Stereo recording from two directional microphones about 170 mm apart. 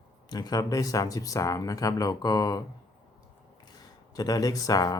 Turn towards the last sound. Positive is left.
turn(degrees=20)  # may be behind; listen again after turning